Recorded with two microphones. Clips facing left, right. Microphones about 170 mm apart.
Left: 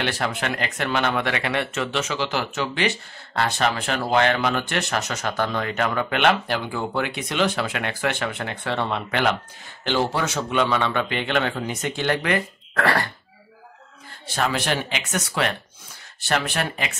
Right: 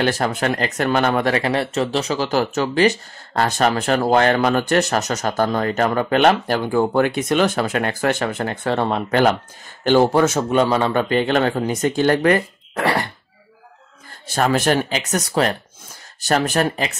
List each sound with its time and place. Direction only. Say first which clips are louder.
0.0 s speech: right 6 dB; 40° right (ahead or behind)
12.7 s throat clearing: right 2 dB; 20° right (ahead or behind)
14.2 s speech: right 7 dB; 45° right (ahead or behind)